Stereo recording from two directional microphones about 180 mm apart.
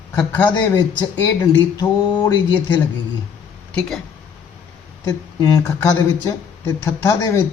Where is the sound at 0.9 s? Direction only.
20° left (ahead or behind); by 4.0 s 5° left (ahead or behind).